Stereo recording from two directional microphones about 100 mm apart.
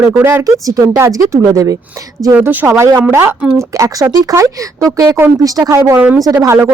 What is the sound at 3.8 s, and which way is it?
A woman's voice, 35° right (ahead or behind).